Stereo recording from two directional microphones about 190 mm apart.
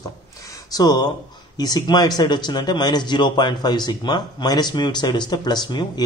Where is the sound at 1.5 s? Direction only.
20° left (ahead or behind).